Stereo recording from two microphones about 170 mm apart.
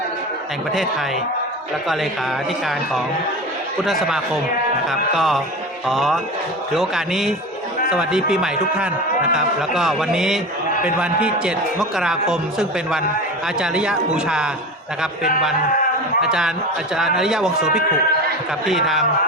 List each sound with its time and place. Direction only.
3.8 s a man's voice: centre (ahead or behind)
16.2 s a man's voice: 5° right (ahead or behind)